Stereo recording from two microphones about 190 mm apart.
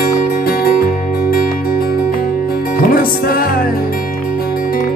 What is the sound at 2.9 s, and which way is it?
Music, 50° left (ahead or behind).